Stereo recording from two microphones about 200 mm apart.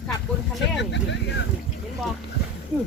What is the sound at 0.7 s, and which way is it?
Speech, 60° left (ahead or behind).